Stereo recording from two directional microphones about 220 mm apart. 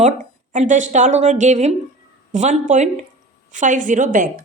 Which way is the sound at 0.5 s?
35° right (ahead or behind).